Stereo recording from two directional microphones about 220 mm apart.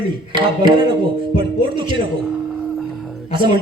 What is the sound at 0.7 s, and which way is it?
A man's voice, 20° right (ahead or behind).